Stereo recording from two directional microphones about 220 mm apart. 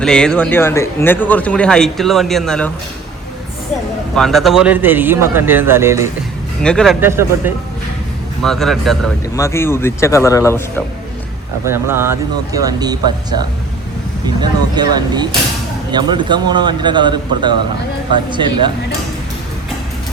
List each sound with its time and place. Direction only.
0.0 s speech: 5° left (ahead or behind)
4.1 s a man's voice: centre (ahead or behind)
6.6 s speech: 5° left (ahead or behind)
7.0 s a man's voice: 10° right (ahead or behind)
8.4 s speech: centre (ahead or behind)
9.3 s speech: 15° left (ahead or behind)
11.6 s a man's voice: 10° right (ahead or behind)
14.8 s speech: 20° right (ahead or behind)